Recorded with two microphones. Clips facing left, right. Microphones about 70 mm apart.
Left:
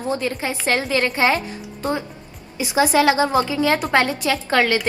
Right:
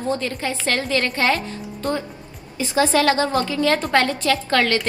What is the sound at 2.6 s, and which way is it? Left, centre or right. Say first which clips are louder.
A woman's voice: left 1 dB; centre.